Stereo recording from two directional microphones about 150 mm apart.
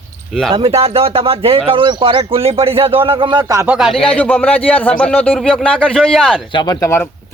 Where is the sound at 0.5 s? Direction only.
40° right (ahead or behind).